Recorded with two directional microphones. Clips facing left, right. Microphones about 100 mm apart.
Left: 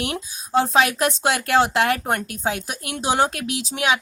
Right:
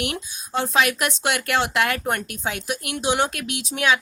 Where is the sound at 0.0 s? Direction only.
35° left (ahead or behind).